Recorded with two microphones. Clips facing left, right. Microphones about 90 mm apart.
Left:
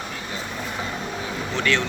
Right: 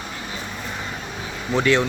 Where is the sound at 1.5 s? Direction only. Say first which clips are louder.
Right 5 dB; 15° right (ahead or behind).